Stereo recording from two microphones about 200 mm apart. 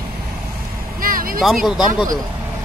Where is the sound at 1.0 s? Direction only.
45° right (ahead or behind).